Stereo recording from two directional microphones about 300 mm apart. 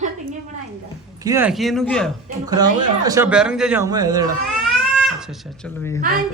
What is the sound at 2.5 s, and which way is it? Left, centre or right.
A man's voice, centre.